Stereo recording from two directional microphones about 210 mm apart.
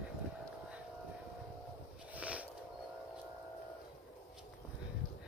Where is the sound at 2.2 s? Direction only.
5° right (ahead or behind).